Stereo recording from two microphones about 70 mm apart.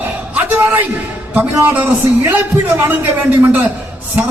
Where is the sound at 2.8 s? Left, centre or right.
Right.